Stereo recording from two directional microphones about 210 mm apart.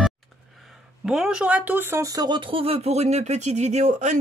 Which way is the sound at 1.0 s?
5° right (ahead or behind).